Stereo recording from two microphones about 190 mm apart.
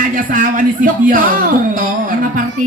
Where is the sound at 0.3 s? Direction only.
45° right (ahead or behind).